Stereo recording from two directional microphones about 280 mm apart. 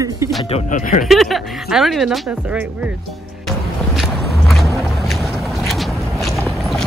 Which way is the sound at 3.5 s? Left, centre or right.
Centre.